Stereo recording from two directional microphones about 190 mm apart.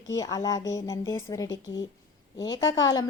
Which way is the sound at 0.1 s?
20° left (ahead or behind).